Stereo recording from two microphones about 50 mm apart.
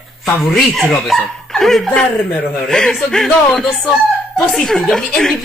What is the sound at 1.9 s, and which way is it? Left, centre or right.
A woman's voice, centre.